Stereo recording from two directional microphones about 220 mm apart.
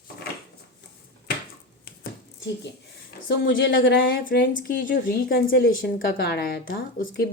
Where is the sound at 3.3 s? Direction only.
55° left (ahead or behind).